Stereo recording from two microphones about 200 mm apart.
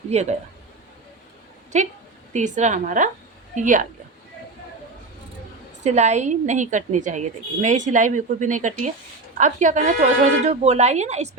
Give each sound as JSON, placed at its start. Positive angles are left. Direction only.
{"t": 0.1, "sound": "a woman's voice", "side_deg": -35}
{"t": 1.7, "sound": "a woman's voice", "side_deg": -35}
{"t": 5.8, "sound": "a woman's voice", "side_deg": -35}